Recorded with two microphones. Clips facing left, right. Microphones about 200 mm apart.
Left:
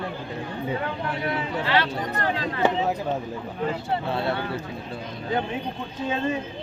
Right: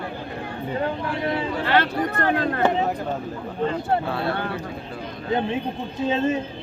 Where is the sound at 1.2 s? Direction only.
30° right (ahead or behind).